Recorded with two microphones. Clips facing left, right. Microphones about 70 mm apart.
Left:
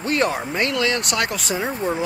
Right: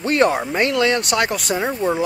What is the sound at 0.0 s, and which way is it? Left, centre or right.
Speech, centre.